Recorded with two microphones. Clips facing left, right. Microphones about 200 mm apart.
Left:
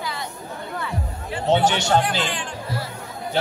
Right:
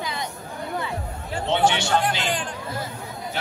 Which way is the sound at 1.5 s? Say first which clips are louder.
Left 3 dB; 40° left (ahead or behind).